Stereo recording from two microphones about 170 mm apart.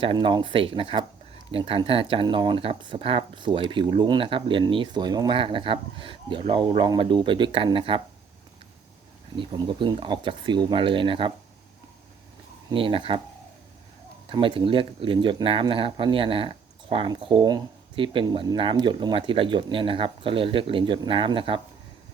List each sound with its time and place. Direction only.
0.0 s speech: 30° right (ahead or behind)
9.4 s speech: 30° right (ahead or behind)
12.7 s speech: 30° right (ahead or behind)
14.3 s speech: 30° right (ahead or behind)